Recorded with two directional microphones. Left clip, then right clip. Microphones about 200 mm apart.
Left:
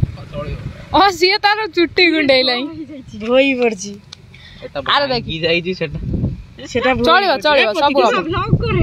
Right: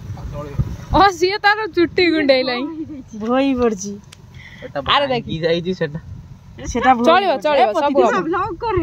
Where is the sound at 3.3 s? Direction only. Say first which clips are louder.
Left 4 dB; 40° right (ahead or behind).